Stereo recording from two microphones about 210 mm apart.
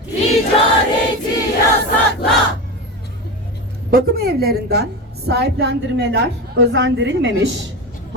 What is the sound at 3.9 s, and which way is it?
A woman's voice, 45° right (ahead or behind).